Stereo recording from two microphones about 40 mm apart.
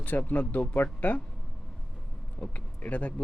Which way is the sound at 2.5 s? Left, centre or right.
Left.